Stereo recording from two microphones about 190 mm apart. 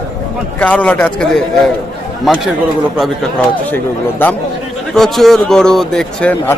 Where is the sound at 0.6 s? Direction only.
5° left (ahead or behind).